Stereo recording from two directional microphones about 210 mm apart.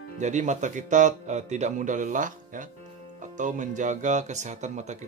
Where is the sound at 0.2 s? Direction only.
35° right (ahead or behind).